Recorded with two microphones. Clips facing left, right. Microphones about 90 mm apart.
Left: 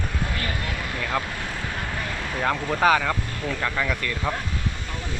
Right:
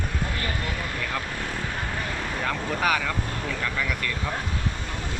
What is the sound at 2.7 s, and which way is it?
Speech, 30° left (ahead or behind).